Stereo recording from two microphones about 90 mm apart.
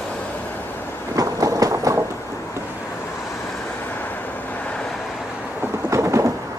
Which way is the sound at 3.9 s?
20° left (ahead or behind).